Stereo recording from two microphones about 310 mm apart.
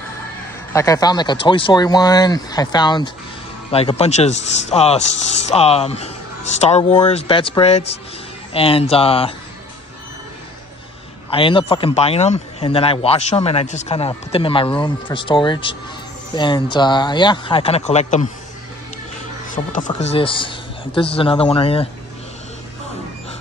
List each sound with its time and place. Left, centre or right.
0.7 s a man's voice: centre
11.2 s a man's voice: centre
19.5 s a man's voice: left